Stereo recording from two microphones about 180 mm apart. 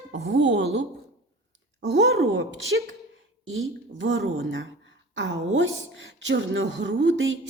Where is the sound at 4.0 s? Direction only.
90° right.